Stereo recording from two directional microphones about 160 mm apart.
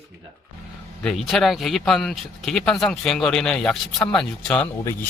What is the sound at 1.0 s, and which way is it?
Speech, centre (ahead or behind).